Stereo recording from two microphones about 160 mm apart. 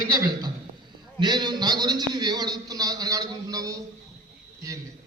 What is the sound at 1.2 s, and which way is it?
A man's voice, 25° right (ahead or behind).